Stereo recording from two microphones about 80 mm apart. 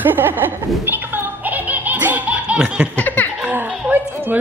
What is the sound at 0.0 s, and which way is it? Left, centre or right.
Giggle, right.